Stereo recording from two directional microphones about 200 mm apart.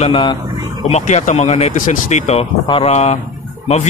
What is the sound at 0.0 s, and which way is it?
A man's voice, 25° left (ahead or behind).